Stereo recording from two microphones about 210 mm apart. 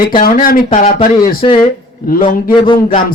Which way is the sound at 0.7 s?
30° left (ahead or behind).